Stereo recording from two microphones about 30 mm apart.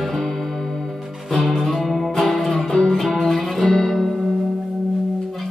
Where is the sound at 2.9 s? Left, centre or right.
Centre.